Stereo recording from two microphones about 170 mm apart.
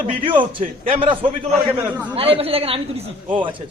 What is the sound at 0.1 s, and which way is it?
Speech, 30° right (ahead or behind).